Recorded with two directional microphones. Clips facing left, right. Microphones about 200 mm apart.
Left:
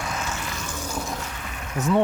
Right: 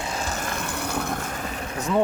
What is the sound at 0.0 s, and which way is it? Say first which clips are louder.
Vehicle: right 1 dB; 30° right (ahead or behind).